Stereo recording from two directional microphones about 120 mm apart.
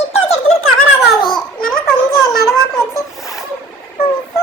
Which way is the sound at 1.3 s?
Centre (ahead or behind).